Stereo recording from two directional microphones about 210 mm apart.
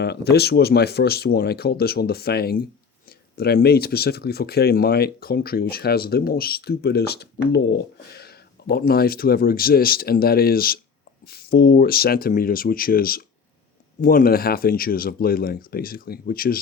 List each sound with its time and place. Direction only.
0.0 s speech: 50° left (ahead or behind)